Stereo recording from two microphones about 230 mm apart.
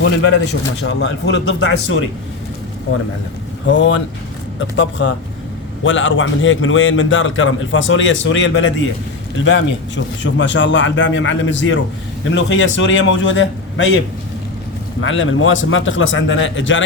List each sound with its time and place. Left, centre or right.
0.0 s a man's voice: left
3.7 s a man's voice: left
15.0 s a man's voice: left